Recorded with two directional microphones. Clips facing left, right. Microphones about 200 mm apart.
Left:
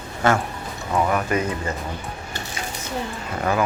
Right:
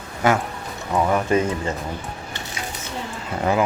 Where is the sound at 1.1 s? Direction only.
25° right (ahead or behind).